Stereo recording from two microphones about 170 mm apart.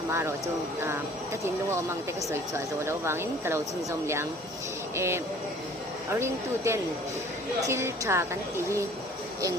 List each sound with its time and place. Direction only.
0.1 s speech: 15° right (ahead or behind)